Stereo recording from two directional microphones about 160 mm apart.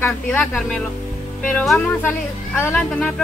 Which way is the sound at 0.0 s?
10° left (ahead or behind).